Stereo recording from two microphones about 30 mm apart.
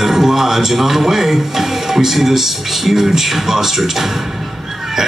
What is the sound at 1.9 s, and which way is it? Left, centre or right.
Speech, centre.